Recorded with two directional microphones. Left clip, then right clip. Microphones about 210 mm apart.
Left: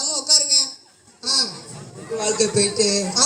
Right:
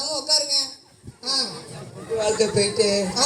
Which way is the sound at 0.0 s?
55° left (ahead or behind).